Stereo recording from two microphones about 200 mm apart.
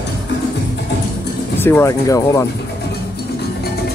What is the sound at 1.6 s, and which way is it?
Speech, 10° left (ahead or behind).